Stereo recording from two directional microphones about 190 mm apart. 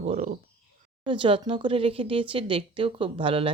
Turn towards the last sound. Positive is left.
turn(degrees=-30)  # may be behind; listen again after turning